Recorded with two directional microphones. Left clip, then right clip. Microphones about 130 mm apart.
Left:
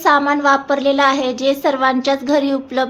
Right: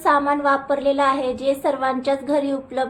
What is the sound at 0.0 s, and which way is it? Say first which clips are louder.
A woman's voice: left 4 dB; 30° left (ahead or behind).